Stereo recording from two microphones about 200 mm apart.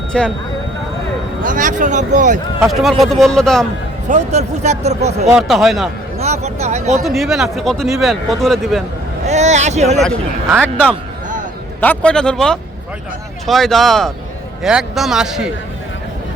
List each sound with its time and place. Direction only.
0.1 s speech: 5° left (ahead or behind)
1.4 s speech: 40° right (ahead or behind)
2.6 s speech: centre (ahead or behind)
4.1 s speech: 35° right (ahead or behind)
5.3 s speech: centre (ahead or behind)
6.1 s speech: 35° right (ahead or behind)
7.0 s speech: centre (ahead or behind)
9.2 s speech: 35° right (ahead or behind)
10.6 s speech: 5° left (ahead or behind)